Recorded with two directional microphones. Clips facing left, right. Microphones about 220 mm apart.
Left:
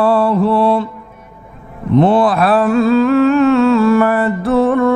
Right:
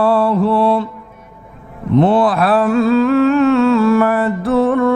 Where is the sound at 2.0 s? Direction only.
40° left (ahead or behind).